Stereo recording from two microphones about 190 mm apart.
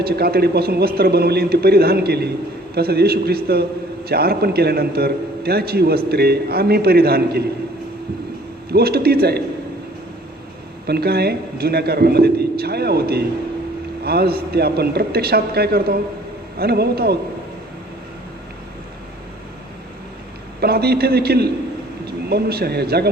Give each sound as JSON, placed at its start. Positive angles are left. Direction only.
{"t": 0.0, "sound": "a man's voice", "side_deg": -55}
{"t": 8.7, "sound": "a man's voice", "side_deg": -55}
{"t": 10.8, "sound": "a man's voice", "side_deg": -55}
{"t": 20.6, "sound": "a man's voice", "side_deg": -55}